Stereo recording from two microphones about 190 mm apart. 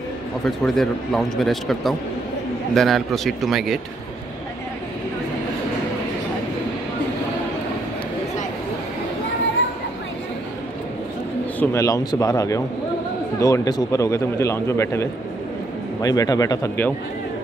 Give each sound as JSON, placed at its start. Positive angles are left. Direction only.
{"t": 0.5, "sound": "speech", "side_deg": 0}
{"t": 11.6, "sound": "a man's voice", "side_deg": 15}